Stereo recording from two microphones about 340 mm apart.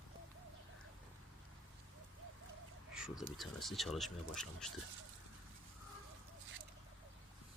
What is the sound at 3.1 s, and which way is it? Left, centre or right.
Speech, centre.